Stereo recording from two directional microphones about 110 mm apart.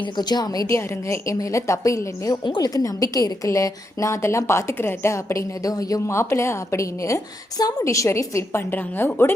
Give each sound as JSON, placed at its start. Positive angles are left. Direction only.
{"t": 0.0, "sound": "a woman's voice", "side_deg": 40}
{"t": 2.4, "sound": "a woman's voice", "side_deg": 45}